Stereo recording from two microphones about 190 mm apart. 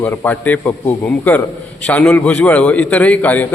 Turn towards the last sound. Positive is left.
turn(degrees=10)  # may be behind; listen again after turning